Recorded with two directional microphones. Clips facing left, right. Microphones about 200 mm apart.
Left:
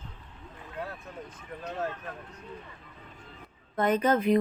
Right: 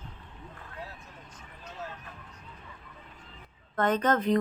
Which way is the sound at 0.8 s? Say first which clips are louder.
Left 6 dB; 55° left (ahead or behind).